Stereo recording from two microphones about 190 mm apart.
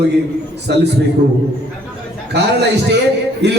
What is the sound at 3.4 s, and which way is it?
Speech, 65° right (ahead or behind).